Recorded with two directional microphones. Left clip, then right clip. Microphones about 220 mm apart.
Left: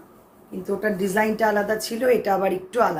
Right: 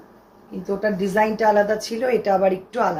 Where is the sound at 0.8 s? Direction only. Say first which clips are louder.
Right 3 dB; 20° left (ahead or behind).